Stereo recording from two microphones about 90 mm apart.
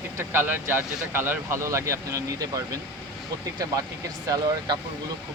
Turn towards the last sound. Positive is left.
turn(degrees=-45)  # may be behind; listen again after turning